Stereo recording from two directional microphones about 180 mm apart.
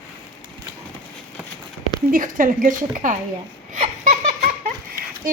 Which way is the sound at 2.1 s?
50° right (ahead or behind).